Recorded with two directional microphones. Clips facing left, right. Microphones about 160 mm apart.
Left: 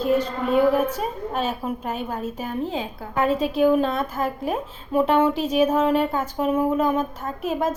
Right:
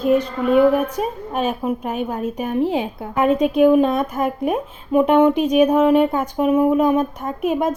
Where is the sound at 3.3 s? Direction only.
55° right (ahead or behind).